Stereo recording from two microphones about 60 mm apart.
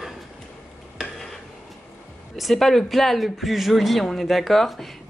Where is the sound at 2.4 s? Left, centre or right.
Centre.